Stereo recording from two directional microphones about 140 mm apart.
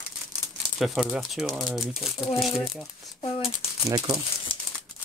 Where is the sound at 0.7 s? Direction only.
5° right (ahead or behind).